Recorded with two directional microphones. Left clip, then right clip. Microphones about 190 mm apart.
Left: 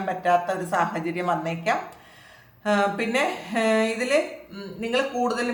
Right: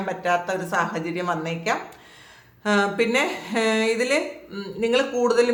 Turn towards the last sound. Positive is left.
turn(degrees=-25)  # may be behind; listen again after turning